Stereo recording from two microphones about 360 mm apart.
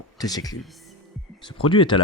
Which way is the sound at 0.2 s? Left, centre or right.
Centre.